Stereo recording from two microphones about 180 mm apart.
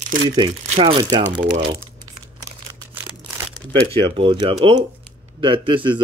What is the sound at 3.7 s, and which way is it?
Speech, 30° right (ahead or behind).